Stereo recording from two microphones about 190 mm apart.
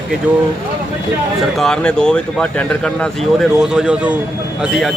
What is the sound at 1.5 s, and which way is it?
Speech, 5° left (ahead or behind).